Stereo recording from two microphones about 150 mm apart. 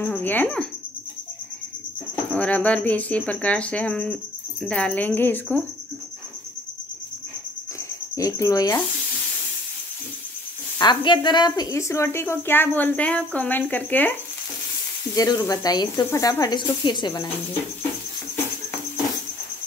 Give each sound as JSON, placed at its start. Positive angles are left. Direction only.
{"t": 0.0, "sound": "speech", "side_deg": 10}
{"t": 2.3, "sound": "speech", "side_deg": 10}
{"t": 8.2, "sound": "speech", "side_deg": 20}
{"t": 10.8, "sound": "speech", "side_deg": 30}
{"t": 15.1, "sound": "speech", "side_deg": 25}